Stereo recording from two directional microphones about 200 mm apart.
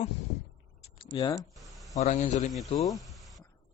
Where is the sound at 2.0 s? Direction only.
35° left (ahead or behind).